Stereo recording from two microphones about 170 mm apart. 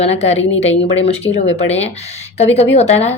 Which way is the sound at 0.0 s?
40° left (ahead or behind).